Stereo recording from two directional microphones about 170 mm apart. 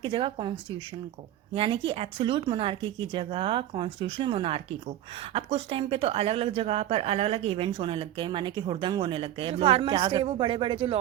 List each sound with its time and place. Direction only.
0.0 s speech: 30° right (ahead or behind)
1.5 s a woman's voice: 30° right (ahead or behind)